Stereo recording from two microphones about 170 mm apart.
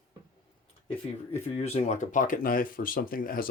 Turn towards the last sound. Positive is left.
turn(degrees=55)  # may be behind; listen again after turning